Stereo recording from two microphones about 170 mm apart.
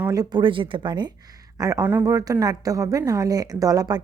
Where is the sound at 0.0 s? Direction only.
20° right (ahead or behind).